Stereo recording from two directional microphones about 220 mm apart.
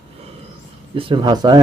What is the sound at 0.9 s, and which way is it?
Speech, 25° right (ahead or behind).